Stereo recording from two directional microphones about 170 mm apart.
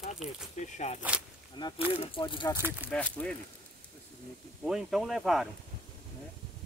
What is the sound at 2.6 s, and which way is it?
Speech, 15° right (ahead or behind).